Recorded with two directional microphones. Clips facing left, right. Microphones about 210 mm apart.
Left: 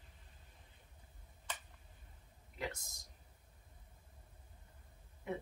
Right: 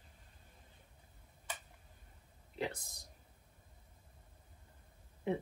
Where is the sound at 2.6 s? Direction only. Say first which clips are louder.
Right 4 dB; 30° right (ahead or behind).